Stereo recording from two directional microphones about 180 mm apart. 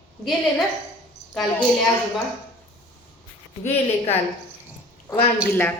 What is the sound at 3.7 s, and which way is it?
Speech, 35° left (ahead or behind).